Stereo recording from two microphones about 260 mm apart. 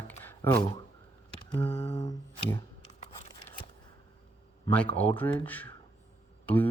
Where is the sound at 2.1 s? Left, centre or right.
Centre.